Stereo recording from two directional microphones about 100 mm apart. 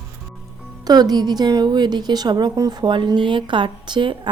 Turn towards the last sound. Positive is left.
turn(degrees=-55)  # may be behind; listen again after turning